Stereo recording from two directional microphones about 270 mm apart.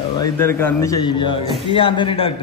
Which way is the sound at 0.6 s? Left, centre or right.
Centre.